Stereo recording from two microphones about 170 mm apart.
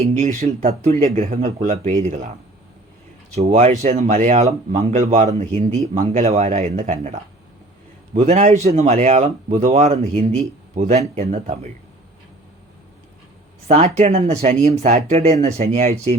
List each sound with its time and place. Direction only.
0.0 s speech: 40° right (ahead or behind)
3.3 s speech: 40° right (ahead or behind)
13.9 s speech: 40° right (ahead or behind)